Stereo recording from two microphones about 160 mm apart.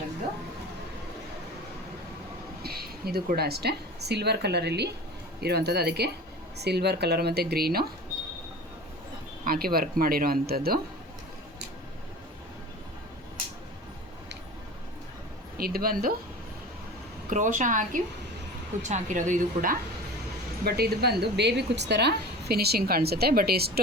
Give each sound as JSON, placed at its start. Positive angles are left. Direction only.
{"t": 2.6, "sound": "a woman's voice", "side_deg": -75}
{"t": 9.4, "sound": "speech", "side_deg": -65}
{"t": 15.5, "sound": "speech", "side_deg": -70}
{"t": 17.2, "sound": "a woman's voice", "side_deg": -50}
{"t": 20.7, "sound": "a woman's voice", "side_deg": -80}